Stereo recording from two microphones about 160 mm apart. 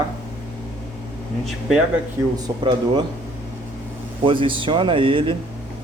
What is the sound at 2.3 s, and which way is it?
Speech, 30° right (ahead or behind).